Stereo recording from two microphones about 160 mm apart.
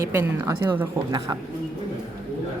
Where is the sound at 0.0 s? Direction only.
20° right (ahead or behind).